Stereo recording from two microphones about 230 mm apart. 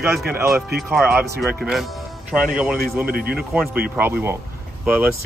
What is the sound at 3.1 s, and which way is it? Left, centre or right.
Speech, right.